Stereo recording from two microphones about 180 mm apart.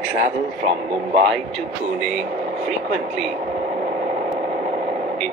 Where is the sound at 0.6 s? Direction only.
45° right (ahead or behind).